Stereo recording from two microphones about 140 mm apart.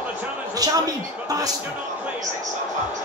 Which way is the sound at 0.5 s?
25° right (ahead or behind).